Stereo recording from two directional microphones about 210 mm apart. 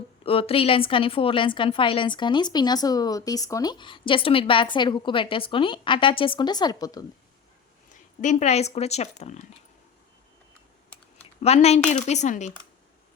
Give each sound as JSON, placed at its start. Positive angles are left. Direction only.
{"t": 0.3, "sound": "a woman's voice", "side_deg": 25}
{"t": 8.2, "sound": "speech", "side_deg": 35}
{"t": 11.4, "sound": "speech", "side_deg": 30}